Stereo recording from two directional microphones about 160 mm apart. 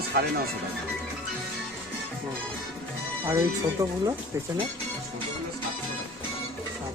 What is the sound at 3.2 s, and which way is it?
Speech, 20° right (ahead or behind).